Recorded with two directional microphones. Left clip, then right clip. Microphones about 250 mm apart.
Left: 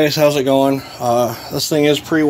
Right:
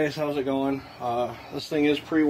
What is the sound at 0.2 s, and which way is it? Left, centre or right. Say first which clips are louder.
Speech: left 14 dB; left.